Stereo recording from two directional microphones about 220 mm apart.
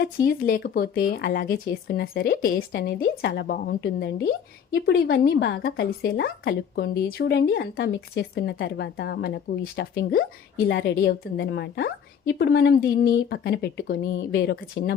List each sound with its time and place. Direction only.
0.4 s a woman's voice: 40° left (ahead or behind)